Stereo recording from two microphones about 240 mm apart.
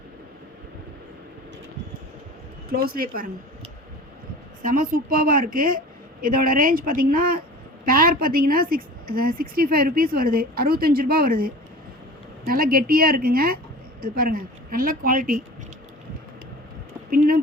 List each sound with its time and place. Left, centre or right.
2.9 s a woman's voice: right
4.6 s a woman's voice: right
17.1 s a sound: right